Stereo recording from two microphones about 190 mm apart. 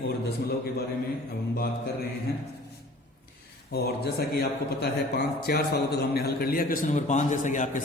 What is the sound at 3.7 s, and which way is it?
A man's voice, 55° left (ahead or behind).